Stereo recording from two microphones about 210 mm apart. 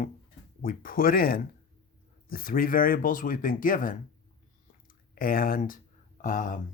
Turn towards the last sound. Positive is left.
turn(degrees=40)  # may be behind; listen again after turning